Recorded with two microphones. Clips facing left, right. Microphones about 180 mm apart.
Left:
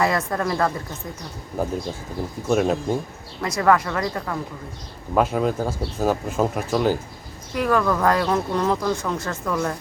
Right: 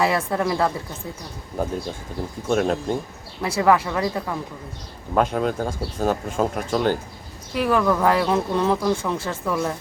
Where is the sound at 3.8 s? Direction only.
15° right (ahead or behind).